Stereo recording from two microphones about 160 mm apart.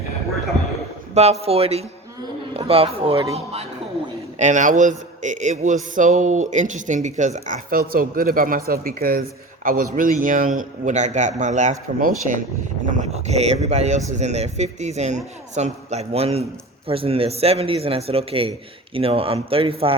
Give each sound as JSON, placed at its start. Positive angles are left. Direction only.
{"t": 1.1, "sound": "a man's voice", "side_deg": -40}